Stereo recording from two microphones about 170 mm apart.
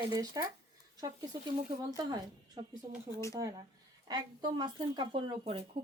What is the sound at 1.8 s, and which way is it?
Speech, 20° right (ahead or behind).